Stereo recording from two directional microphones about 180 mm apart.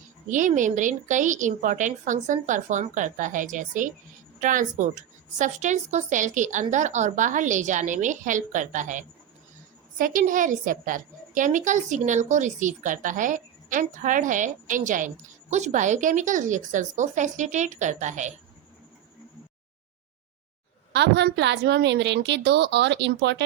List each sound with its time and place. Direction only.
0.3 s a woman's voice: 45° right (ahead or behind)
20.9 s a woman's voice: 70° right (ahead or behind)